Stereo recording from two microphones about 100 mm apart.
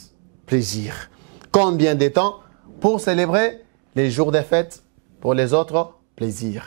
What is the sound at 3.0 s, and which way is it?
Speech, 15° right (ahead or behind).